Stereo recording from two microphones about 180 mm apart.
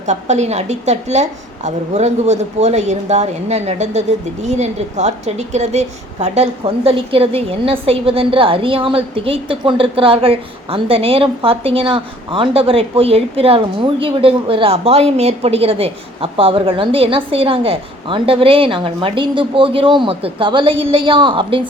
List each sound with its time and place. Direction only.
0.0 s a woman's voice: 40° right (ahead or behind)